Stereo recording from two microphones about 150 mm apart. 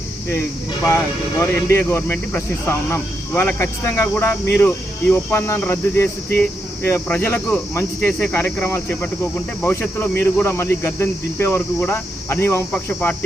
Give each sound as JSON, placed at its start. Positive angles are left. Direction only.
{"t": 0.9, "sound": "speech", "side_deg": 20}